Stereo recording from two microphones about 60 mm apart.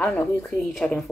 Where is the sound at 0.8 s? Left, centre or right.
Centre.